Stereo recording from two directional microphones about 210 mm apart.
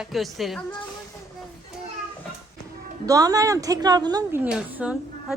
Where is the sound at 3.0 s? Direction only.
15° right (ahead or behind).